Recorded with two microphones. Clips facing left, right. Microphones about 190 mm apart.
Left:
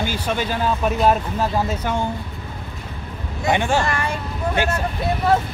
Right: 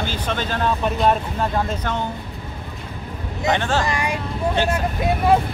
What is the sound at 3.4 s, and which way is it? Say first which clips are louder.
Speech: left 1 dB; 10° left (ahead or behind).